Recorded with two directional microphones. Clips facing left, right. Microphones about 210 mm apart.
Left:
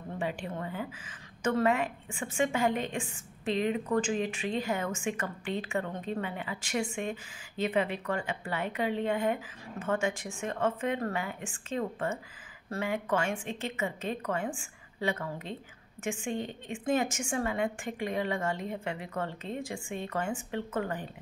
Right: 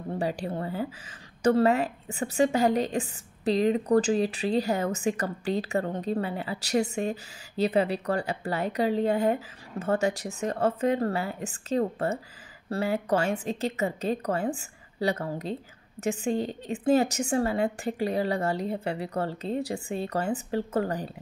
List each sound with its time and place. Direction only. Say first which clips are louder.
0.1 s a woman's voice: right 5 dB; 35° right (ahead or behind)